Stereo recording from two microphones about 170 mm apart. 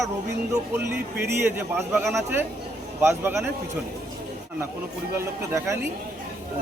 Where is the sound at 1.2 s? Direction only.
15° right (ahead or behind).